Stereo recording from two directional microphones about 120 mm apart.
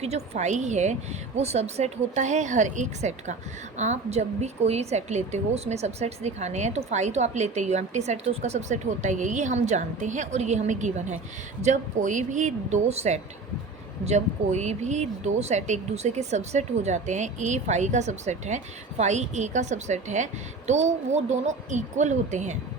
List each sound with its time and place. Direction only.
0.0 s speech: 65° right (ahead or behind)
1.4 s a woman's voice: 60° right (ahead or behind); by 11.2 s 80° right
11.6 s a woman's voice: 90° right